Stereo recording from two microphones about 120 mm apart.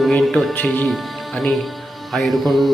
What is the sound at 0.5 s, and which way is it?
Speech, 15° left (ahead or behind).